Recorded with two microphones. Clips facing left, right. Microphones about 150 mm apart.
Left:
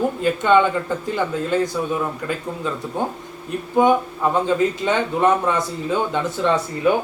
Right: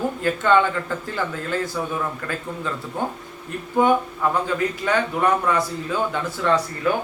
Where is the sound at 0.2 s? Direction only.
20° left (ahead or behind).